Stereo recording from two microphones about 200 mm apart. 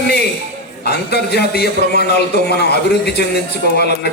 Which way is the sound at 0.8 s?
55° left (ahead or behind).